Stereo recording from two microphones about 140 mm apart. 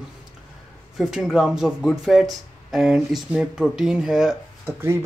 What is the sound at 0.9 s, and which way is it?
Speech, centre (ahead or behind).